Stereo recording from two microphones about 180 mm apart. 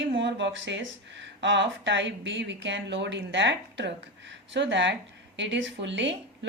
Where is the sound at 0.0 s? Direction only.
85° right.